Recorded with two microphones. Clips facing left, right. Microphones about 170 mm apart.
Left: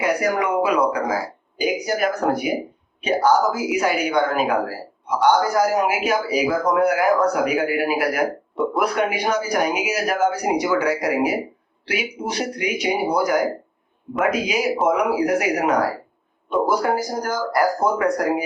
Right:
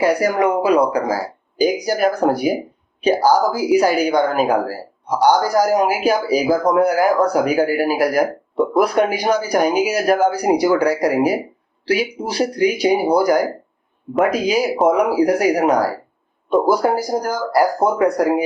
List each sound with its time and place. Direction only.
0.0 s speech: 35° right (ahead or behind)